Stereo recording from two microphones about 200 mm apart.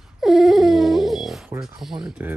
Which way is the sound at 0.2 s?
Centre (ahead or behind).